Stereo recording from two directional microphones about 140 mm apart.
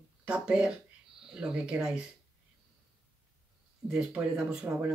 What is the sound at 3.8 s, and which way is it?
Speech, 5° right (ahead or behind).